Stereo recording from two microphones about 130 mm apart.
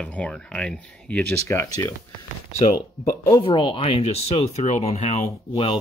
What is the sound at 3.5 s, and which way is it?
Speech, 40° left (ahead or behind).